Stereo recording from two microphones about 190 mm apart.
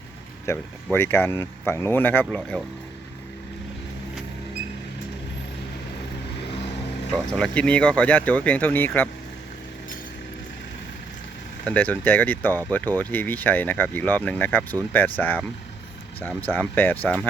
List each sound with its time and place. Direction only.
0.5 s speech: 15° left (ahead or behind)
7.1 s speech: 5° left (ahead or behind)
11.6 s speech: 10° left (ahead or behind)